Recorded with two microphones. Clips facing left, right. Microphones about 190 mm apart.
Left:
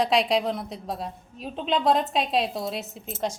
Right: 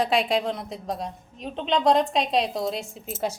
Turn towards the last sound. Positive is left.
turn(degrees=-5)  # may be behind; listen again after turning